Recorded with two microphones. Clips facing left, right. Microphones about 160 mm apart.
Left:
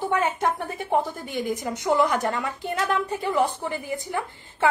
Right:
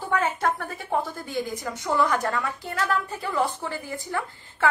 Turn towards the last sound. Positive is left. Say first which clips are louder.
# left 2 dB
turn(degrees=20)  # may be behind; listen again after turning